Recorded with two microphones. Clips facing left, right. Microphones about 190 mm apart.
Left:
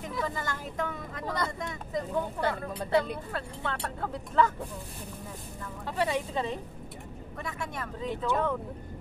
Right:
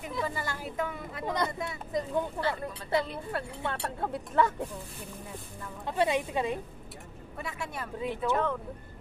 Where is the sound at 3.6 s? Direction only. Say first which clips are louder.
Even; 20° right (ahead or behind).